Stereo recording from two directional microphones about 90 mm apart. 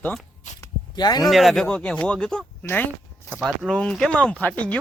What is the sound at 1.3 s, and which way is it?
Speech, centre (ahead or behind).